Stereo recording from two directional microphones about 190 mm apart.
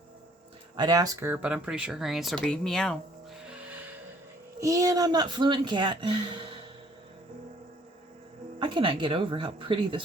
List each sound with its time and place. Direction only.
0.8 s speech: 20° right (ahead or behind); by 3.0 s 5° left (ahead or behind)
3.5 s music: 10° right (ahead or behind)
4.6 s speech: 15° right (ahead or behind)
8.5 s speech: 25° right (ahead or behind)